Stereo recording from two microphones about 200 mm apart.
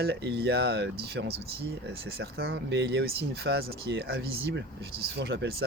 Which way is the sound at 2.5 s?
60° right (ahead or behind).